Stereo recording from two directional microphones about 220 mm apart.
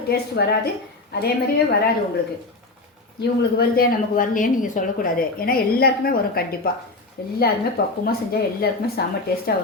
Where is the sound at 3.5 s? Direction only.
45° left (ahead or behind).